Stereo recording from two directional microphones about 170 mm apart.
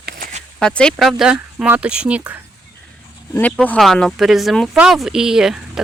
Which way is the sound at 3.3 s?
10° left (ahead or behind).